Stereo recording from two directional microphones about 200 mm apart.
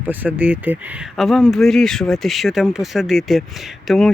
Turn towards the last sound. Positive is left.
turn(degrees=0)  # may be behind; listen again after turning